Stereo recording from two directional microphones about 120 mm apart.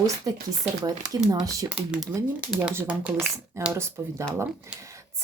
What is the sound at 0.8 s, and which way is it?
Speech, 35° right (ahead or behind).